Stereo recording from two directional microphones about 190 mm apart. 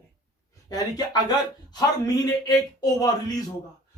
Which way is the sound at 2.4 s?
20° left (ahead or behind).